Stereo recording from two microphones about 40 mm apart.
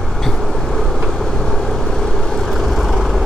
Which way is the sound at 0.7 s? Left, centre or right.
Centre.